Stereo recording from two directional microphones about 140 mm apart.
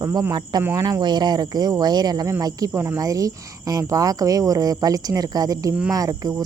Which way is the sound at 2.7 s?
15° right (ahead or behind).